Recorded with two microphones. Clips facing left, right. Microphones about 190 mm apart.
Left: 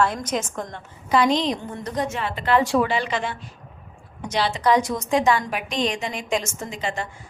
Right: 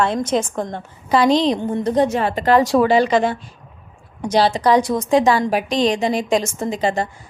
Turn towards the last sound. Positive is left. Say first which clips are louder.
# right 9 dB
turn(degrees=-35)  # may be behind; listen again after turning